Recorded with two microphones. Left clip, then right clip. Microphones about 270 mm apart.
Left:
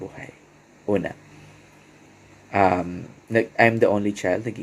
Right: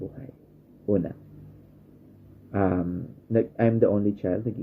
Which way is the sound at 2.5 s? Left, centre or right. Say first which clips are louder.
Left 7 dB; left.